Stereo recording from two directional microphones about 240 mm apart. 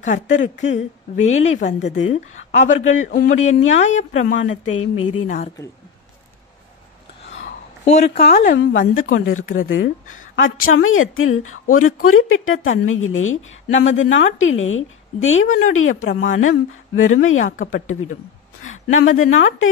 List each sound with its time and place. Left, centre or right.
0.0 s speech: left
4.4 s speech: left
7.8 s speech: left
8.5 s a woman's voice: left
10.0 s a sound: left
10.7 s a woman's voice: left